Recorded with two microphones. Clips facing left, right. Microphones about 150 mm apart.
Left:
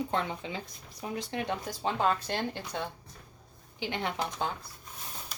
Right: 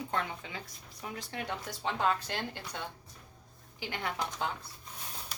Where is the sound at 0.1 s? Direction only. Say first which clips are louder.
Left 4 dB; 25° left (ahead or behind).